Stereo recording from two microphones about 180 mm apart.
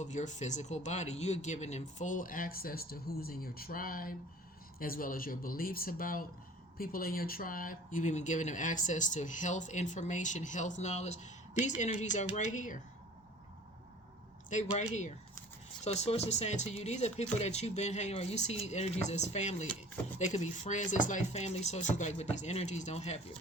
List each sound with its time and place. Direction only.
0.0 s speech: 40° left (ahead or behind)
15.8 s speech: 35° left (ahead or behind)